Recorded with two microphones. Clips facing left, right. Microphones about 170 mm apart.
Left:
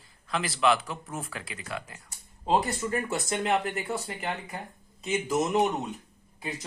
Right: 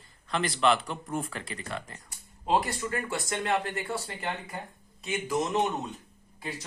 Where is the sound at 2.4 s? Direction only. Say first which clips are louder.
Left 1 dB; 20° left (ahead or behind).